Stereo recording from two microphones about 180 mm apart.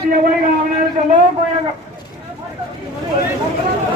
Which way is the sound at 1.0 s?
35° right (ahead or behind).